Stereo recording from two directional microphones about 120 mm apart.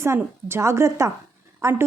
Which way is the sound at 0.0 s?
20° right (ahead or behind).